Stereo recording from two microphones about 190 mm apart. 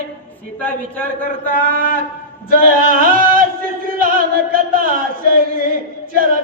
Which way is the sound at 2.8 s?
50° right (ahead or behind).